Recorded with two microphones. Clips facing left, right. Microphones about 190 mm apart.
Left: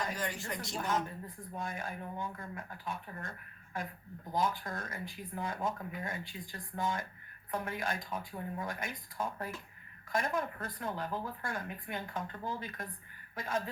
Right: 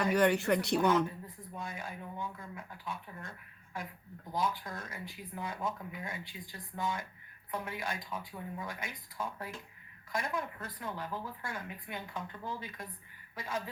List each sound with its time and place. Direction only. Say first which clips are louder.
0.0 s speech: right 10 dB; 65° right (ahead or behind)
1.4 s speech: left 4 dB; 50° left (ahead or behind)
4.4 s speech: left 1 dB; 50° left (ahead or behind)